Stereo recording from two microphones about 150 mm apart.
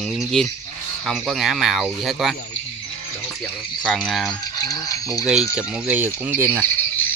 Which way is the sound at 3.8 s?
5° left (ahead or behind).